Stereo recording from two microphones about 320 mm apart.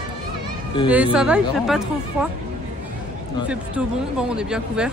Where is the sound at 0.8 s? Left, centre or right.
Centre.